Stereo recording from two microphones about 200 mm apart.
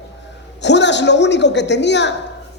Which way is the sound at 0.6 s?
60° left (ahead or behind).